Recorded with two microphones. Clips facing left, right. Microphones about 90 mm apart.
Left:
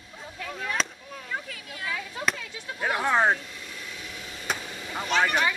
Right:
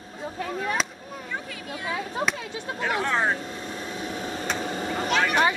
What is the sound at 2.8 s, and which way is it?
Speech, 15° left (ahead or behind).